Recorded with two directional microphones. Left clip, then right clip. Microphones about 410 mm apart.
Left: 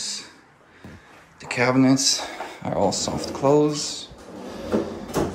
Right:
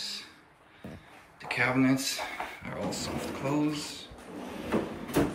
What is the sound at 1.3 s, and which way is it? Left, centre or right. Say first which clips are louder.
Speech: left 7 dB; centre.